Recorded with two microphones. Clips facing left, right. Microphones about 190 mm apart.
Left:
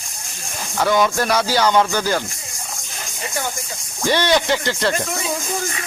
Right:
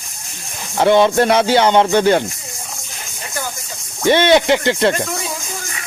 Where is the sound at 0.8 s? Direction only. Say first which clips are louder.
Right 6 dB; 25° right (ahead or behind).